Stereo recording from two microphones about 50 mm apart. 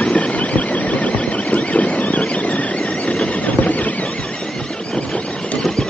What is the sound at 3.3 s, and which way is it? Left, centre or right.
Horse, left.